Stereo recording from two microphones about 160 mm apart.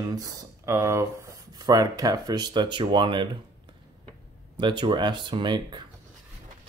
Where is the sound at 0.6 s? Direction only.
15° right (ahead or behind).